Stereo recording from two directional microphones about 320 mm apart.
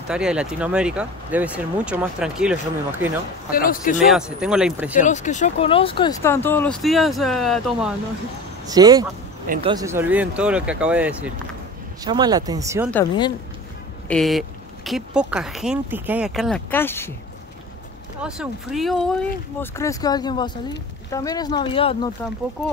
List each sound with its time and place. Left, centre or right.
0.1 s speech: centre
3.5 s speech: left
4.0 s speech: centre
5.0 s speech: left; by 7.9 s centre
8.6 s speech: centre
14.0 s speech: centre
18.2 s speech: centre